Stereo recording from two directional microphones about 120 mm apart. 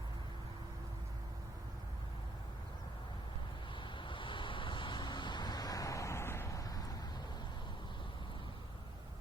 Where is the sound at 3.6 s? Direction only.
40° left (ahead or behind).